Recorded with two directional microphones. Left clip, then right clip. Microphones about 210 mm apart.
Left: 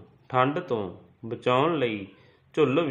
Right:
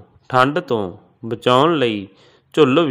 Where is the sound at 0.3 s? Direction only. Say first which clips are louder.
Right 9 dB; 40° right (ahead or behind).